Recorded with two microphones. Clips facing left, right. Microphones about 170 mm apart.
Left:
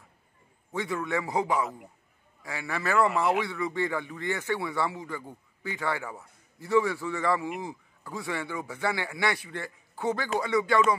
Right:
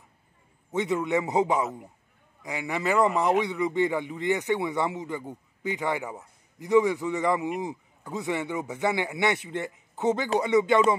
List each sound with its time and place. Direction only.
0.7 s speech: 20° right (ahead or behind)